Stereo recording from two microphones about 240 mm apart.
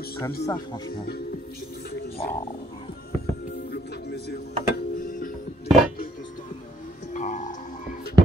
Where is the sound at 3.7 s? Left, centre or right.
Left.